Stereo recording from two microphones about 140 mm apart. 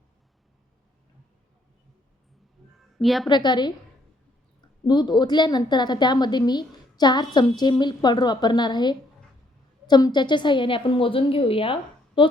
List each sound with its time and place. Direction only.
2.7 s a sound: centre (ahead or behind)
3.2 s a woman's voice: 30° left (ahead or behind)
4.9 s a woman's voice: 30° left (ahead or behind)